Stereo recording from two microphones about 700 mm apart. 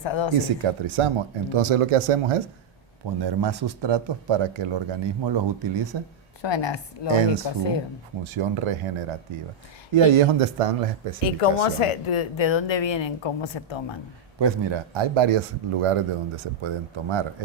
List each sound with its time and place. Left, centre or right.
0.0 s a woman's voice: left
0.6 s speech: right
3.2 s speech: right
6.4 s a woman's voice: left
8.3 s speech: right
9.9 s speech: right
11.2 s a woman's voice: left
14.3 s speech: right